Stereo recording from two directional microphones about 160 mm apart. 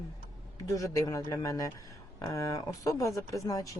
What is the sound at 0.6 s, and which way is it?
Speech, 20° left (ahead or behind).